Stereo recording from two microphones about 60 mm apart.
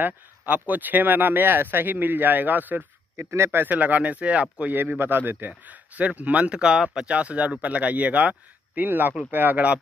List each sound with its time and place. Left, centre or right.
0.0 s speech: right
3.2 s speech: right
3.6 s speech: right
4.7 s speech: right